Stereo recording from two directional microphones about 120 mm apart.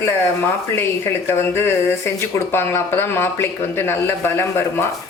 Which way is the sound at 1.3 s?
20° left (ahead or behind).